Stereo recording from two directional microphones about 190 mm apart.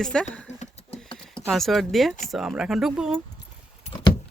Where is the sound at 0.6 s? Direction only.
30° left (ahead or behind).